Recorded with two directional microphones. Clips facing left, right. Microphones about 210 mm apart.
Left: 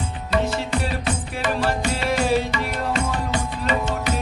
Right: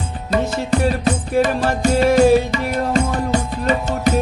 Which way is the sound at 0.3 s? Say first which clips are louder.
Right 4 dB; 40° right (ahead or behind).